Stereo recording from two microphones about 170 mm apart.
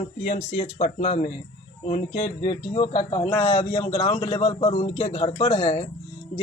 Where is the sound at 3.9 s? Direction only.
30° left (ahead or behind).